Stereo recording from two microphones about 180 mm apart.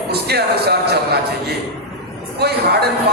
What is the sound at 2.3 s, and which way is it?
Speech, 65° right (ahead or behind).